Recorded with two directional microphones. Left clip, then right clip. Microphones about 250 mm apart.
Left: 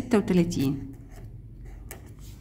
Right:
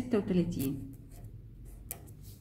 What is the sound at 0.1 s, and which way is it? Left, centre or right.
Speech, left.